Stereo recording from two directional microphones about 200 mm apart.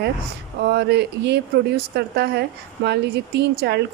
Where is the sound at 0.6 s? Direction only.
55° right (ahead or behind).